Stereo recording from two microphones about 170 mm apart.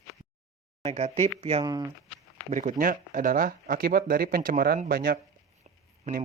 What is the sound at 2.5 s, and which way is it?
Speech, 50° right (ahead or behind).